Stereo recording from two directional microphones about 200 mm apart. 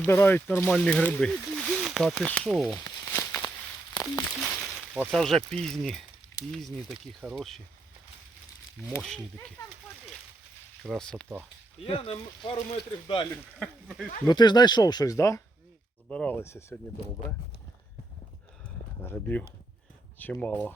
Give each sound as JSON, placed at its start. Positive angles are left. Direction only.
{"t": 0.0, "sound": "speech", "side_deg": 10}
{"t": 2.7, "sound": "a sound", "side_deg": 10}
{"t": 4.9, "sound": "speech", "side_deg": 0}
{"t": 9.0, "sound": "speech", "side_deg": 0}
{"t": 10.8, "sound": "speech", "side_deg": 5}
{"t": 11.9, "sound": "speech", "side_deg": 25}
{"t": 13.6, "sound": "speech", "side_deg": 0}
{"t": 14.3, "sound": "speech", "side_deg": 20}
{"t": 19.0, "sound": "speech", "side_deg": 10}